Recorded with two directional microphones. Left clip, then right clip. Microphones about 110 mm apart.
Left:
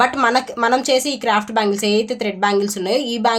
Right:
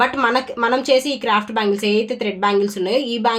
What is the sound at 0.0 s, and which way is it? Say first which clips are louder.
A woman's voice: left 1 dB; 35° left (ahead or behind).